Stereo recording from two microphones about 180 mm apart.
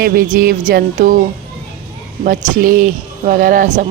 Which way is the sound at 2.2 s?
45° right (ahead or behind).